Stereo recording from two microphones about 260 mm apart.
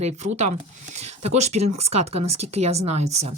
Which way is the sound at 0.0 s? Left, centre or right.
Right.